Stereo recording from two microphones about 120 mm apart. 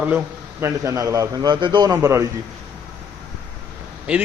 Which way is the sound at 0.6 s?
25° right (ahead or behind).